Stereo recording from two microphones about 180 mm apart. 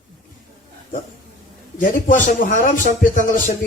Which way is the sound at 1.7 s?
50° left (ahead or behind).